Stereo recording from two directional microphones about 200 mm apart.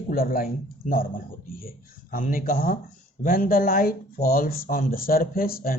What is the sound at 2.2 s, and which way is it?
Speech, 45° left (ahead or behind).